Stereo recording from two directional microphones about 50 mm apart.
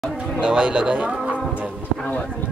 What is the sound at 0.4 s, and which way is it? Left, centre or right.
Speech, centre.